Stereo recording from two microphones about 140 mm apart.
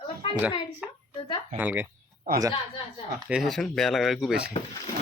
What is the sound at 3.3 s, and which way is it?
Speech, centre (ahead or behind).